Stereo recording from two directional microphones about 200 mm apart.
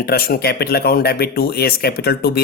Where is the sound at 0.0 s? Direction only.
50° left (ahead or behind).